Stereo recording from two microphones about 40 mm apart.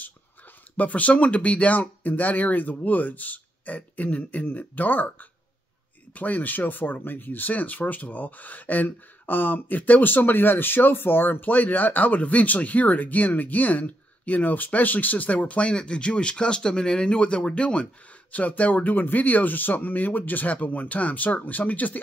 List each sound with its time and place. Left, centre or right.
0.7 s speech: left
6.1 s speech: left
11.4 s speech: left
18.3 s speech: left